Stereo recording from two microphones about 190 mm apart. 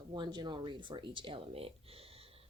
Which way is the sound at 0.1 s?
20° right (ahead or behind).